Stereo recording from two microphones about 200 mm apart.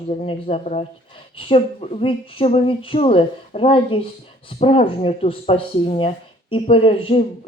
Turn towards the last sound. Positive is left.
turn(degrees=25)  # may be behind; listen again after turning